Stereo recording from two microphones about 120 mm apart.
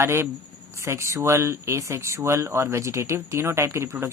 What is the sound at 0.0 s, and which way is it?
Speech, 20° right (ahead or behind).